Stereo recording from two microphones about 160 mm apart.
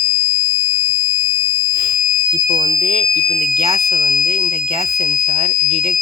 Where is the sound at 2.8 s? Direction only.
45° right (ahead or behind).